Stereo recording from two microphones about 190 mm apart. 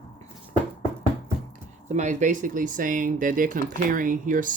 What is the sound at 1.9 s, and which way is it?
Speech, 40° right (ahead or behind).